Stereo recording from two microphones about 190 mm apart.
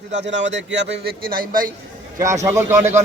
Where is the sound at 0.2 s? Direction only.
70° right (ahead or behind); by 1.6 s 50° right (ahead or behind).